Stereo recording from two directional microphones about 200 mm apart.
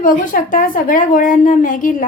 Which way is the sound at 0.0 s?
40° left (ahead or behind).